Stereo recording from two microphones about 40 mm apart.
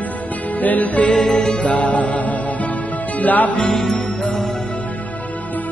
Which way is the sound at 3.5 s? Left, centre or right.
Left.